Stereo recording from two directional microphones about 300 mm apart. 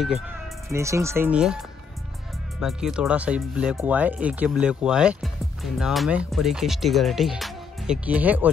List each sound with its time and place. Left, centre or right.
0.7 s speech: centre
2.6 s speech: centre